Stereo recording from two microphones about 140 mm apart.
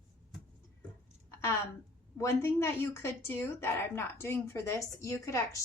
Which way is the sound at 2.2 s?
20° left (ahead or behind).